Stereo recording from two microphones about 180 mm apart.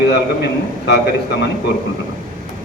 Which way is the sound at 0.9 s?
65° left (ahead or behind).